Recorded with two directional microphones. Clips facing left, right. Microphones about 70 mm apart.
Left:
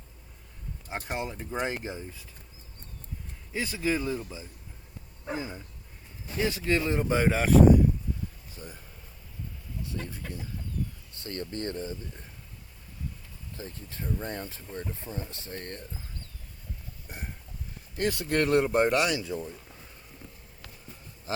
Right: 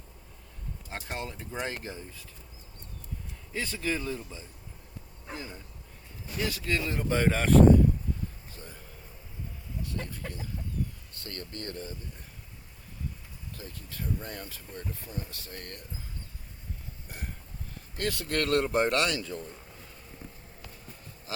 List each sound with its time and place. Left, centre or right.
1.0 s a man's voice: left
3.5 s a man's voice: centre
7.1 s a man's voice: centre
8.5 s speech: centre
10.0 s chicken: centre
11.1 s speech: left
13.6 s speech: left
17.1 s hiccup: left
17.9 s speech: left
18.7 s a man's voice: centre